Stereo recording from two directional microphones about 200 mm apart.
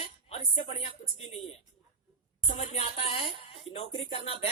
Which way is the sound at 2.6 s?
30° left (ahead or behind).